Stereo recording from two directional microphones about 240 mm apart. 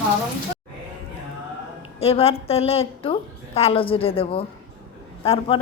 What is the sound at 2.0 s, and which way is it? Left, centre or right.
A woman's voice, left.